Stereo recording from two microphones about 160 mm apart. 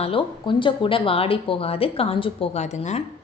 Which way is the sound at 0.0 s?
35° left (ahead or behind).